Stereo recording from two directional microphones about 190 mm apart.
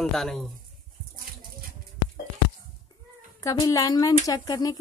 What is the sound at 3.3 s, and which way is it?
A woman's voice, 15° left (ahead or behind).